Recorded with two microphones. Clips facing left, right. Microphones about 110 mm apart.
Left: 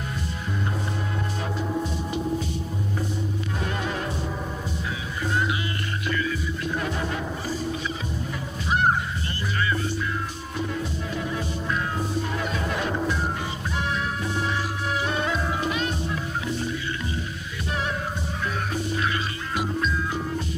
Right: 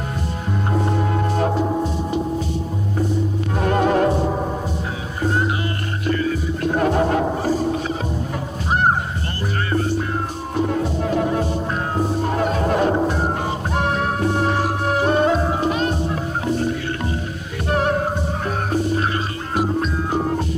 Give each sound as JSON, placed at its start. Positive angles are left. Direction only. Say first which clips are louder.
{"t": 0.7, "sound": "music", "louder": "right 9 dB", "side_deg": -55}
{"t": 3.6, "sound": "music", "louder": "right 15 dB", "side_deg": -55}
{"t": 5.2, "sound": "music", "louder": "right 5 dB", "side_deg": -40}
{"t": 8.6, "sound": "honk", "louder": "right 4 dB", "side_deg": -45}
{"t": 9.7, "sound": "music", "louder": "right 6 dB", "side_deg": -50}
{"t": 13.7, "sound": "music", "louder": "right 7 dB", "side_deg": -55}